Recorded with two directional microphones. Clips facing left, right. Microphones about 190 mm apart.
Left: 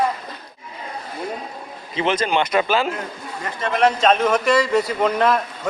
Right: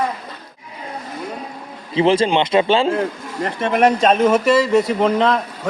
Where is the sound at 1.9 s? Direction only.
30° right (ahead or behind).